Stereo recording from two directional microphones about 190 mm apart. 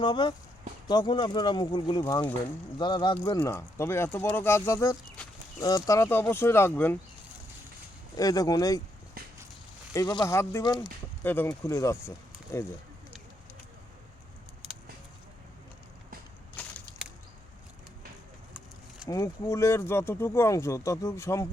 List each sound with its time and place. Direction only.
0.0 s speech: 25° left (ahead or behind)
8.1 s speech: 20° left (ahead or behind)
9.9 s speech: 20° left (ahead or behind)
16.6 s a sound: 5° left (ahead or behind)
19.0 s speech: 15° left (ahead or behind)